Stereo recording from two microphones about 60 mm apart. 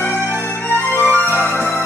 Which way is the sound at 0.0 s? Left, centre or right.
Left.